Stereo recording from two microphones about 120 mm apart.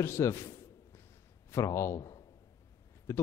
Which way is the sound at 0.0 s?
20° left (ahead or behind).